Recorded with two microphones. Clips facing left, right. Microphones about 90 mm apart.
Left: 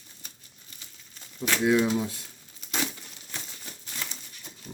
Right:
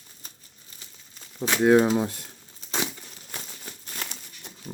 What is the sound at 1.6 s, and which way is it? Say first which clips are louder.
Speech: right 5 dB; 40° right (ahead or behind).